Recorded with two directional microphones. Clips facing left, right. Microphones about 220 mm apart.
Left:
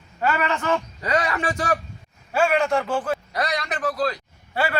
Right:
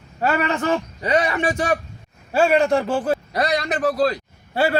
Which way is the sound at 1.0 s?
20° right (ahead or behind).